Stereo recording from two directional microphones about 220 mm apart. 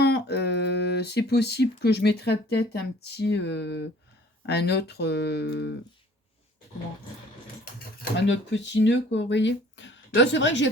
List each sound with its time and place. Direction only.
0.0 s speech: 50° left (ahead or behind)
8.1 s speech: 55° left (ahead or behind)